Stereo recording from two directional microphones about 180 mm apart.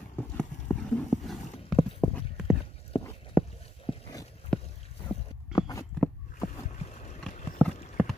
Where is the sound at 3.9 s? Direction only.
30° left (ahead or behind).